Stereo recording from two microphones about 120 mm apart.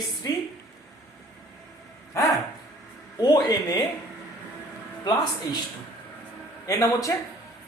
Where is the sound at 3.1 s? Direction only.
30° left (ahead or behind).